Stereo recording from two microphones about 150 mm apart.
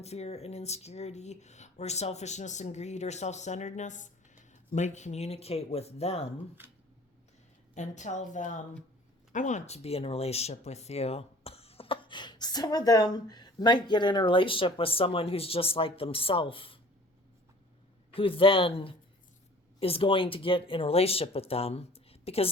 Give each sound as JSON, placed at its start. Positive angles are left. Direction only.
{"t": 0.0, "sound": "speech", "side_deg": 45}
{"t": 6.6, "sound": "speech", "side_deg": -15}
{"t": 7.8, "sound": "a woman's voice", "side_deg": 50}
{"t": 18.1, "sound": "speech", "side_deg": 35}